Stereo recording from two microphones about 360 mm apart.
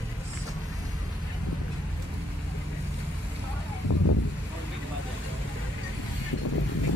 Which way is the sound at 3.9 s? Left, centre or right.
Left.